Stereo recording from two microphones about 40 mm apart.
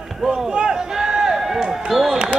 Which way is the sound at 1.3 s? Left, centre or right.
Centre.